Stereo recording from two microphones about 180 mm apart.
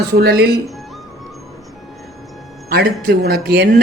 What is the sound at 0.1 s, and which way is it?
Speech, 60° right (ahead or behind).